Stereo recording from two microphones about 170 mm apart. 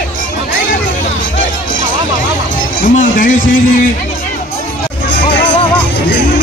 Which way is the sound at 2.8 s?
50° left (ahead or behind).